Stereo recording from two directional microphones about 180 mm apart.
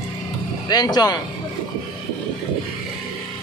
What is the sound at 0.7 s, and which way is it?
Speech, 20° left (ahead or behind).